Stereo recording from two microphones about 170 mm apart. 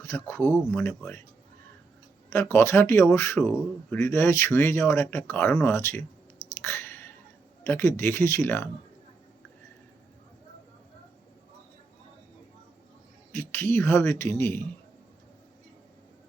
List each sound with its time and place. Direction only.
0.0 s speech: 15° left (ahead or behind)
2.3 s speech: 15° left (ahead or behind)
6.6 s chewing: 15° left (ahead or behind)
7.6 s speech: 15° left (ahead or behind)
13.3 s speech: 15° left (ahead or behind)